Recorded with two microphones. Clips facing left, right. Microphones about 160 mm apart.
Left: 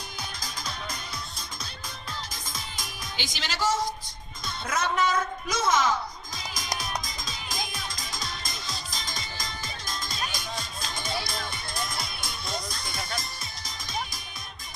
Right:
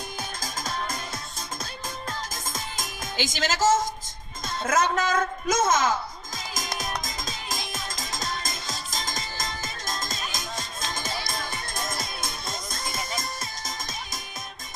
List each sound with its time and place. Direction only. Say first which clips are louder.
0.4 s music: right 6 dB; 45° right (ahead or behind)
4.4 s speech: right 5 dB; 45° right (ahead or behind)
6.3 s music: right 3 dB; 45° right (ahead or behind)
13.0 s music: right 1 dB; centre (ahead or behind)
13.4 s music: right 5 dB; 45° right (ahead or behind)